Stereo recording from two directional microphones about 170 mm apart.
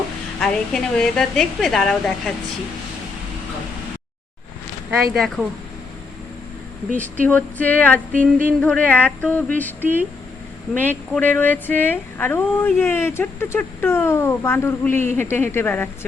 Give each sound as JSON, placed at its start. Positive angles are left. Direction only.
{"t": 0.3, "sound": "a woman's voice", "side_deg": 5}
{"t": 6.9, "sound": "speech", "side_deg": 10}
{"t": 8.1, "sound": "a sound", "side_deg": -50}
{"t": 8.6, "sound": "speech", "side_deg": 5}
{"t": 9.8, "sound": "speech", "side_deg": -10}
{"t": 10.8, "sound": "speech", "side_deg": 10}